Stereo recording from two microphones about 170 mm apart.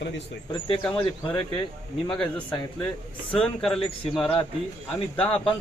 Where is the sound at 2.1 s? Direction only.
5° left (ahead or behind).